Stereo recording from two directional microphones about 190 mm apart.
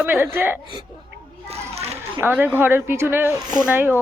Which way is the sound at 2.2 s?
10° right (ahead or behind).